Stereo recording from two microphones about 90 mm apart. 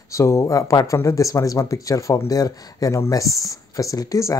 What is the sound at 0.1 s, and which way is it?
Speech, 35° left (ahead or behind).